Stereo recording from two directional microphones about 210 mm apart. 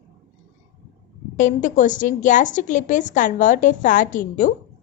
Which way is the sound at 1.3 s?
35° left (ahead or behind).